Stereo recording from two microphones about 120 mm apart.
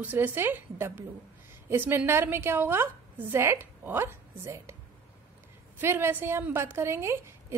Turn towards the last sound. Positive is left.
turn(degrees=-20)  # may be behind; listen again after turning